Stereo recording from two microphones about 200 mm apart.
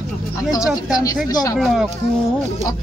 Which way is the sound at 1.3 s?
20° left (ahead or behind).